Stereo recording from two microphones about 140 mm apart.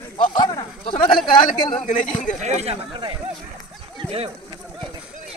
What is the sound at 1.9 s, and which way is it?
Speech, 60° left (ahead or behind).